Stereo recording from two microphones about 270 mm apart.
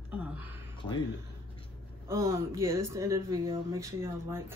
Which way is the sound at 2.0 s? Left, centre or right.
Centre.